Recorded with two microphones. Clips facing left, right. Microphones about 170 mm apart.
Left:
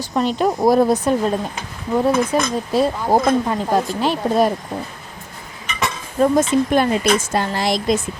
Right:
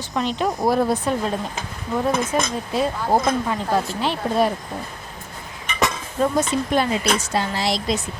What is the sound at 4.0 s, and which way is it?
Speech, 40° left (ahead or behind).